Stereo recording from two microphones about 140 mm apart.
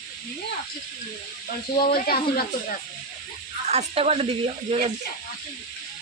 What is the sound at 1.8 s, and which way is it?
Speech, 90° left.